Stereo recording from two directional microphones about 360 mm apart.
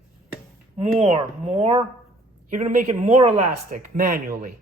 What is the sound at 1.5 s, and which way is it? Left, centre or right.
Speech, centre.